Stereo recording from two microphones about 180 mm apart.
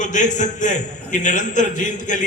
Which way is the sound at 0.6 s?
45° left (ahead or behind).